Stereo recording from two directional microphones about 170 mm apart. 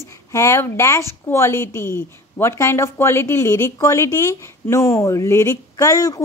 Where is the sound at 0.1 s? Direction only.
15° left (ahead or behind).